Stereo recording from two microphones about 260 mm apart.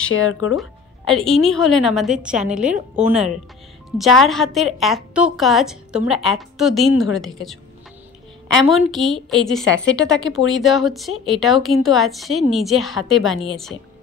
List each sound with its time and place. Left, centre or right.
0.1 s speech: left
0.6 s music: centre
1.3 s speech: left
1.6 s a woman's voice: centre
8.6 s a woman's voice: centre
9.7 s speech: left
9.9 s a woman's voice: centre